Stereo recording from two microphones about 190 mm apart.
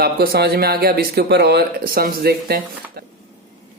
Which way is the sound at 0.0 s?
55° right (ahead or behind).